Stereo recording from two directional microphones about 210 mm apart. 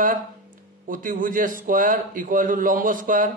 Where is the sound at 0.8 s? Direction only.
40° right (ahead or behind).